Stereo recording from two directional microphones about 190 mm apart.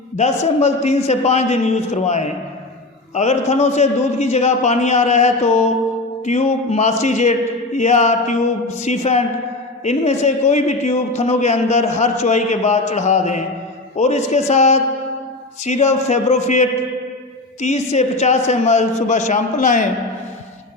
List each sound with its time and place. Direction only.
0.2 s a man's voice: 35° left (ahead or behind)